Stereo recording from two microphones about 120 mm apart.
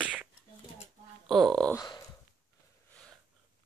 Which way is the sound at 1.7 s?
35° left (ahead or behind).